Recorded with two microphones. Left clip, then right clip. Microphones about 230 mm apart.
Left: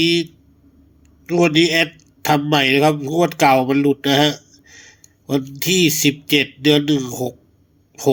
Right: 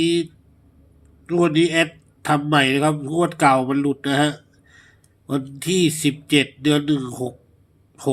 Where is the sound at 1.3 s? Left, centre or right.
Left.